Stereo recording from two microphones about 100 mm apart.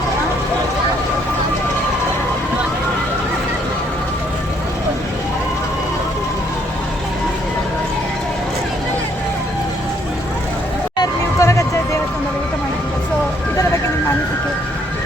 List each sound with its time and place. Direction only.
10.9 s hubbub: 35° left (ahead or behind)